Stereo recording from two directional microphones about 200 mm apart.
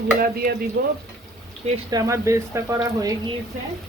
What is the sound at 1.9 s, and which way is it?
Speech, 15° right (ahead or behind).